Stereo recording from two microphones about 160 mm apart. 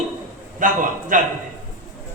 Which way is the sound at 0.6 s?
55° right (ahead or behind).